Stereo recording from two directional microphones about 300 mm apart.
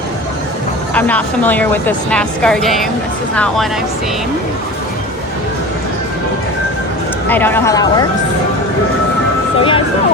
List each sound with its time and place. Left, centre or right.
0.9 s a woman's voice: centre
7.3 s speech: centre
9.6 s music: centre